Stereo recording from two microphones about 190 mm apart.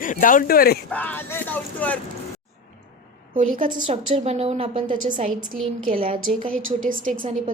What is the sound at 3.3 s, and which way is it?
Speech, 45° right (ahead or behind).